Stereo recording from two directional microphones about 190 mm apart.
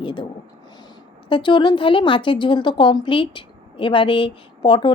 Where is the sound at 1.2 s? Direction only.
25° left (ahead or behind).